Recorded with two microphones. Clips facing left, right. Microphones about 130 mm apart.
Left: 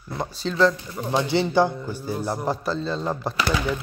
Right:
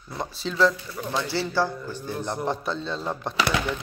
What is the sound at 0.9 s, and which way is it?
A man's voice, 20° left (ahead or behind).